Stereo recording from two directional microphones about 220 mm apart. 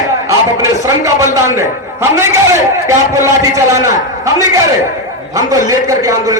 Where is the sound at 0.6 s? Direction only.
15° right (ahead or behind).